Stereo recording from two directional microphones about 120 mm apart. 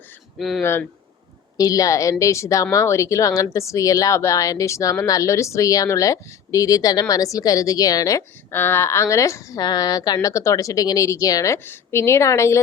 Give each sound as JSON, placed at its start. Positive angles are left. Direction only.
{"t": 0.3, "sound": "speech", "side_deg": 0}
{"t": 0.6, "sound": "a woman's voice", "side_deg": 20}